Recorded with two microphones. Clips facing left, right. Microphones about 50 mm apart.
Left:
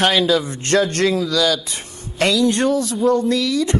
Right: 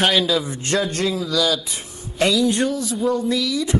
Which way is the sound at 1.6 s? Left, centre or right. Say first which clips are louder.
Left 1 dB; left.